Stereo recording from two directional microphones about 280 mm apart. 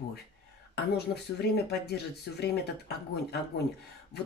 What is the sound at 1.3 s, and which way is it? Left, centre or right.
Speech, left.